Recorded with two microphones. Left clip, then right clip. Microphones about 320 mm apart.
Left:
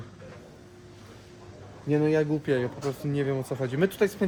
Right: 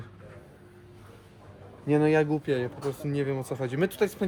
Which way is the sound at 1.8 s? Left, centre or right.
Centre.